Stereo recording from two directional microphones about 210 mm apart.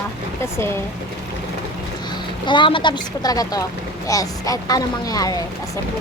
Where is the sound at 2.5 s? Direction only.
25° left (ahead or behind).